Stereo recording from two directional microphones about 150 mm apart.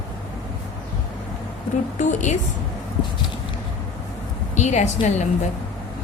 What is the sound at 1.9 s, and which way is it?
Speech, 55° left (ahead or behind).